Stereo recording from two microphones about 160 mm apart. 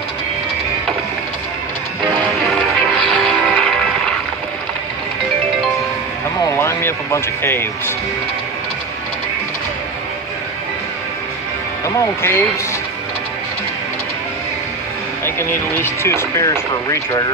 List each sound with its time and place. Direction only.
2.1 s music: centre (ahead or behind)
6.4 s speech: 15° left (ahead or behind)
12.0 s speech: 15° left (ahead or behind)
15.2 s speech: 15° left (ahead or behind)